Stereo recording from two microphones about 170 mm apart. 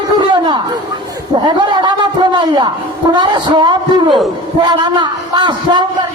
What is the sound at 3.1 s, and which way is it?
A man's voice, 25° right (ahead or behind).